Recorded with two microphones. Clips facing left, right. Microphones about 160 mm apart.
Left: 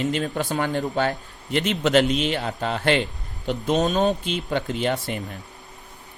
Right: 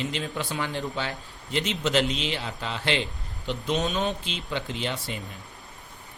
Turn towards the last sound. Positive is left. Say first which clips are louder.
# left 7 dB
turn(degrees=50)  # may be behind; listen again after turning